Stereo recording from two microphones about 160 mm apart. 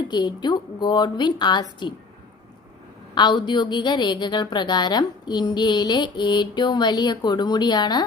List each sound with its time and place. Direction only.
0.1 s a woman's voice: 25° left (ahead or behind)
3.2 s a woman's voice: 30° left (ahead or behind)